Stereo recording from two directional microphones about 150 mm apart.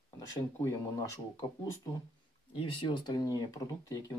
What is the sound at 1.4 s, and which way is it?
Speech, 25° left (ahead or behind).